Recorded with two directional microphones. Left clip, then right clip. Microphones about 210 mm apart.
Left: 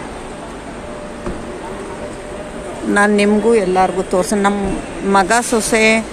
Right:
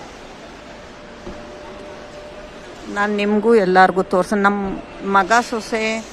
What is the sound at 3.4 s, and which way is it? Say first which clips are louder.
A woman's voice: right 5 dB; 25° right (ahead or behind).